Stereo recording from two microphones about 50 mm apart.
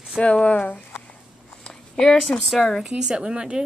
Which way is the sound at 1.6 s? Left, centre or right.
Centre.